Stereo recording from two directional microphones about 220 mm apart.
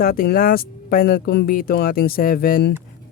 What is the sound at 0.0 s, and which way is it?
Speech, 40° left (ahead or behind).